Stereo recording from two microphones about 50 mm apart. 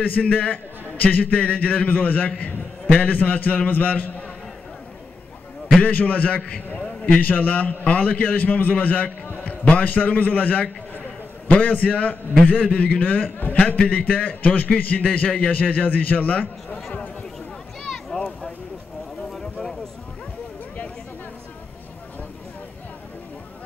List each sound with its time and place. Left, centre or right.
0.0 s a man's voice: left
5.8 s a man's voice: left
14.0 s a man's voice: left
17.8 s a sound: centre